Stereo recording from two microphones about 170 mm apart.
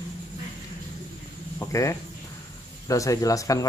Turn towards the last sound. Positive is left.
turn(degrees=20)  # may be behind; listen again after turning